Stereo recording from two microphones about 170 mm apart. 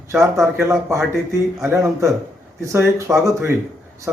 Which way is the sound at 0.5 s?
15° right (ahead or behind).